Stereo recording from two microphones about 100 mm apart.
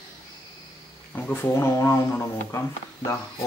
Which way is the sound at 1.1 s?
20° left (ahead or behind).